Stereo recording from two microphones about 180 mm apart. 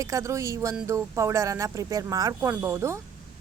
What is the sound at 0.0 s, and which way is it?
A woman's voice, 15° right (ahead or behind).